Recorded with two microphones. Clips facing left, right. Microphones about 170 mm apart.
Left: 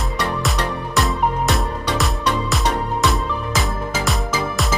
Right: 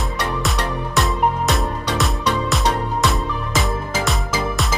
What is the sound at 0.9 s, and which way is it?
Music, centre (ahead or behind).